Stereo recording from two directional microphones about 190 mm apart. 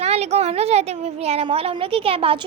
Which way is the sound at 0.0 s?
35° right (ahead or behind).